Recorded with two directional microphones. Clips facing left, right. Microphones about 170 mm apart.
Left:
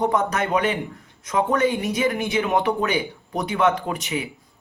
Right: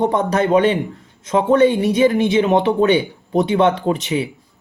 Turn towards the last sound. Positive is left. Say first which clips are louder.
# right 8 dB
turn(degrees=-30)  # may be behind; listen again after turning